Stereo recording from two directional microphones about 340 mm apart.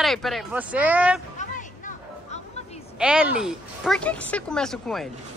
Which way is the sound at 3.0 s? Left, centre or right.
Centre.